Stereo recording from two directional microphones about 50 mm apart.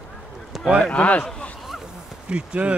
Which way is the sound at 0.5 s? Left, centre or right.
Centre.